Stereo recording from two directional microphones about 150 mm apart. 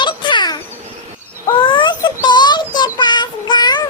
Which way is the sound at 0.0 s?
30° left (ahead or behind).